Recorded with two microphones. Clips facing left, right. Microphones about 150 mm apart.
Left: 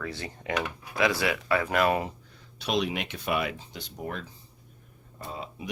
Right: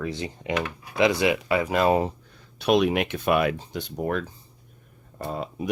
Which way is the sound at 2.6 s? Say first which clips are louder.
Right 8 dB; 55° right (ahead or behind).